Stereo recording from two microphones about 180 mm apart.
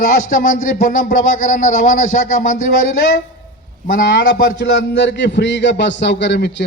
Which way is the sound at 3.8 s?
60° left (ahead or behind).